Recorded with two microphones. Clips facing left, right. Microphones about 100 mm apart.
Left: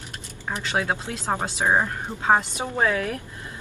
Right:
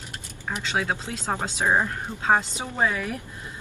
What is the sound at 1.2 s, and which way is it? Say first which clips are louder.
Speech: left 1 dB; 15° left (ahead or behind).